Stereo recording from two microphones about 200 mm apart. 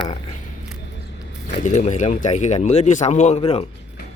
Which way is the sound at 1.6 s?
35° left (ahead or behind).